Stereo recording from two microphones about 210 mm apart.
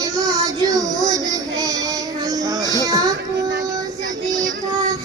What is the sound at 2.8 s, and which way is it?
Music, 15° right (ahead or behind).